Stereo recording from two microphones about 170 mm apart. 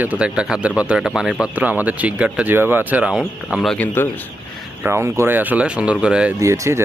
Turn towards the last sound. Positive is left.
turn(degrees=-20)  # may be behind; listen again after turning